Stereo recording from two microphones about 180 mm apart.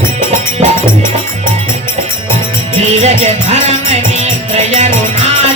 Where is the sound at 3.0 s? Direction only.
40° right (ahead or behind).